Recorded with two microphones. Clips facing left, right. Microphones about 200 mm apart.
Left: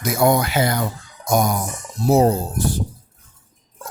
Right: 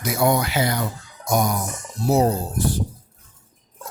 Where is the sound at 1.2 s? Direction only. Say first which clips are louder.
Left 2 dB; 45° left (ahead or behind).